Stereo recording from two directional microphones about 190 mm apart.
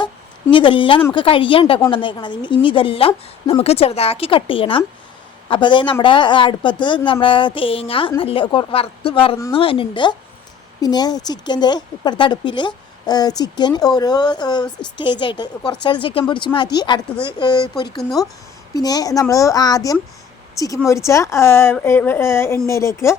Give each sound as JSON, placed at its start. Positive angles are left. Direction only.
{"t": 0.5, "sound": "speech", "side_deg": 25}